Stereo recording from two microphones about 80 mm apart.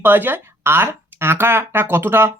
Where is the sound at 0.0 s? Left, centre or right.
Right.